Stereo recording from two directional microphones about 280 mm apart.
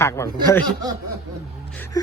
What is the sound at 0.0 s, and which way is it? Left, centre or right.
Speech, centre.